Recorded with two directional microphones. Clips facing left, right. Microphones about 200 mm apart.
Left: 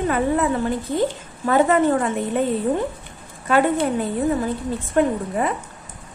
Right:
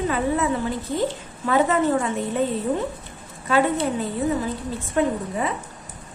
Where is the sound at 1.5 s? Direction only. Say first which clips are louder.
Left 3 dB; 50° left (ahead or behind).